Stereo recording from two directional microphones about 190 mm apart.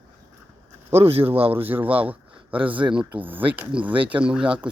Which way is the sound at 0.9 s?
30° right (ahead or behind).